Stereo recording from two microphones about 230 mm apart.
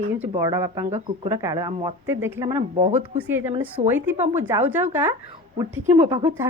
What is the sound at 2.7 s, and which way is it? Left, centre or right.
Speech, right.